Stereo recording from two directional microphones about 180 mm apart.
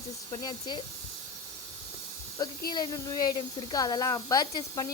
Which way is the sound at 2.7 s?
20° left (ahead or behind).